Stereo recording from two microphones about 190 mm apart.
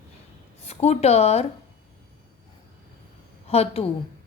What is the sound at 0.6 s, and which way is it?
Speech, 35° left (ahead or behind).